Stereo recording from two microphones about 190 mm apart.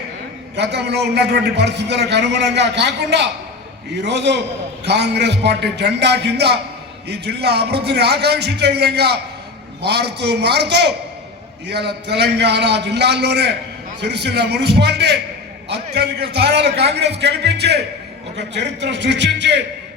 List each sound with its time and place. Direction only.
0.5 s a man's voice: 60° right (ahead or behind)